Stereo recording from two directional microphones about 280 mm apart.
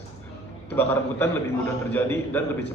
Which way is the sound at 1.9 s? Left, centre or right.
Centre.